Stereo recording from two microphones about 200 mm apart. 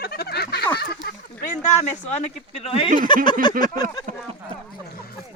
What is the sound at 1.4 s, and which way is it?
Speech, 35° left (ahead or behind).